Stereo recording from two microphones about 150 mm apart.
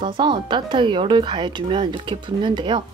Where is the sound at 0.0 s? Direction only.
30° right (ahead or behind).